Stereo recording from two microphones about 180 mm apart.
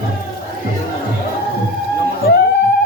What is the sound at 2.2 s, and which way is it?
Music, 60° left (ahead or behind).